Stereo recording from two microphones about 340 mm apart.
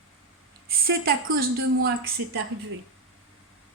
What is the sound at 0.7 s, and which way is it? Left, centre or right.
Speech, right.